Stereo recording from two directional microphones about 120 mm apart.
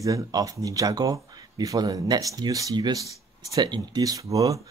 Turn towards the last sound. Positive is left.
turn(degrees=-30)  # may be behind; listen again after turning